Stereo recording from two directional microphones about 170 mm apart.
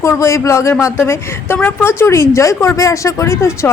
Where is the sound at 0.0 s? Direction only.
15° left (ahead or behind).